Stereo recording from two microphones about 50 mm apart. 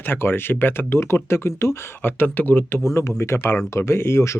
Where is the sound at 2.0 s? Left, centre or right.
Left.